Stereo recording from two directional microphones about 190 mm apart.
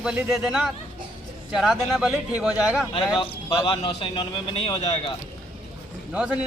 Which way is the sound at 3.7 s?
25° left (ahead or behind).